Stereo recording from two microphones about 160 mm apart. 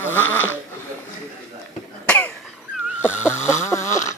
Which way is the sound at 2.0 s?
10° left (ahead or behind).